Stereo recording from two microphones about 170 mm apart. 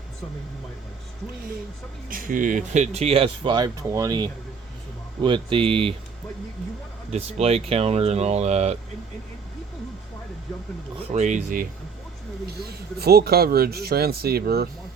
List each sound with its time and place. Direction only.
2.0 s speech: 55° right (ahead or behind); by 5.9 s 30° right (ahead or behind)
7.1 s speech: 40° right (ahead or behind)
11.1 s speech: 45° right (ahead or behind)
12.5 s speech: 70° right (ahead or behind)